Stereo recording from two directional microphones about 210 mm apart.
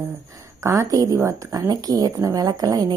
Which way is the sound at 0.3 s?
15° right (ahead or behind).